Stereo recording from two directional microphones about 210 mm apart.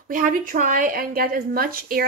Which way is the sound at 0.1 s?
40° right (ahead or behind).